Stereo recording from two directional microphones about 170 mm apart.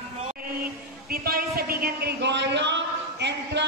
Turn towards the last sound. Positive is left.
turn(degrees=-90)